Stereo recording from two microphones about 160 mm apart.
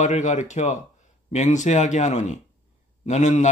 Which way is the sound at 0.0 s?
50° left (ahead or behind).